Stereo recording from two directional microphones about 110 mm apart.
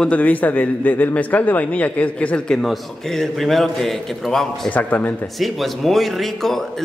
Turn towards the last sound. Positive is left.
turn(degrees=0)  # may be behind; listen again after turning